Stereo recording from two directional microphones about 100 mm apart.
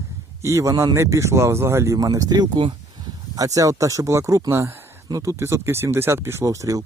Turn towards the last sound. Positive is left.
turn(degrees=-30)  # may be behind; listen again after turning